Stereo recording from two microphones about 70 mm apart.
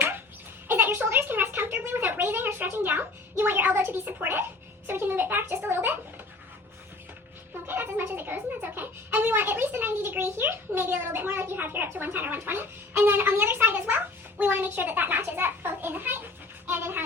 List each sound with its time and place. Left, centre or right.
0.7 s a sound: right
4.9 s a child's voice: right
7.7 s speech: right